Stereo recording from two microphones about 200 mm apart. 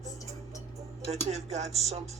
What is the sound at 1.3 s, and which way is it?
Speech, 35° right (ahead or behind).